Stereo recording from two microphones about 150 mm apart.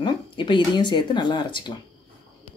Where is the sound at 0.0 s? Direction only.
30° left (ahead or behind).